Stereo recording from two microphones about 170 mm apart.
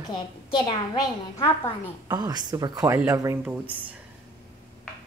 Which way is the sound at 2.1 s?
25° right (ahead or behind).